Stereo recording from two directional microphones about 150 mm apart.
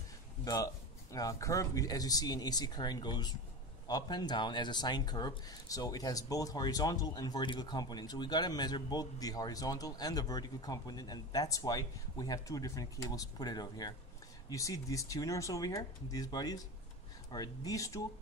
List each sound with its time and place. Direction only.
1.1 s speech: 20° left (ahead or behind)